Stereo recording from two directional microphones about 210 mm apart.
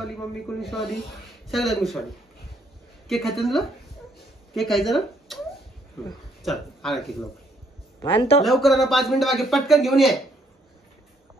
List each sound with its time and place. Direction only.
0.1 s a man's voice: centre (ahead or behind)
3.1 s a man's voice: centre (ahead or behind)
6.4 s speech: centre (ahead or behind)
8.0 s speech: 25° left (ahead or behind)
8.5 s a man's voice: centre (ahead or behind)